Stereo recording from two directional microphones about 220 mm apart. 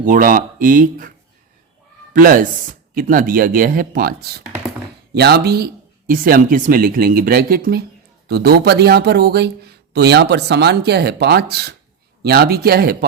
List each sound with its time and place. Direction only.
0.0 s speech: 40° right (ahead or behind)
2.1 s speech: 40° right (ahead or behind)